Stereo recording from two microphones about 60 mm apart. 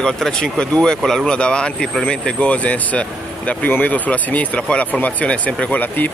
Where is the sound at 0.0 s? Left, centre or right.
Centre.